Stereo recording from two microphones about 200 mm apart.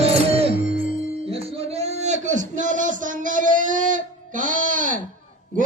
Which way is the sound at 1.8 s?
35° right (ahead or behind).